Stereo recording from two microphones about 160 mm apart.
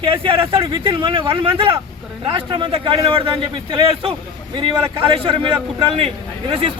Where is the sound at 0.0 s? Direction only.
35° right (ahead or behind).